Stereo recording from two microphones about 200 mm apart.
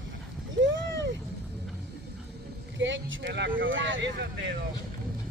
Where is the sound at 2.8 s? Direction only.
65° right (ahead or behind).